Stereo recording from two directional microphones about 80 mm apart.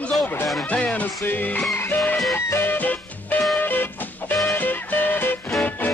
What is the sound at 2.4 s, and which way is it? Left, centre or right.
Music, left.